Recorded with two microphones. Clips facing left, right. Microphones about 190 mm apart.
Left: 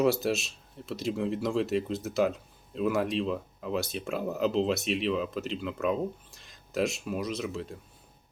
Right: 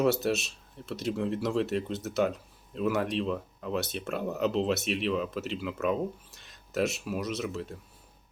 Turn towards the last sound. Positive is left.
turn(degrees=0)  # may be behind; listen again after turning